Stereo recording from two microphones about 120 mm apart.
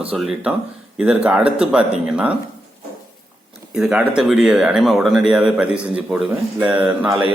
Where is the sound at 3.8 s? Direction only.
5° right (ahead or behind).